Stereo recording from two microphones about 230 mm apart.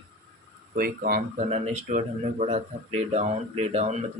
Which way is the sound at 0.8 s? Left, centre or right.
Right.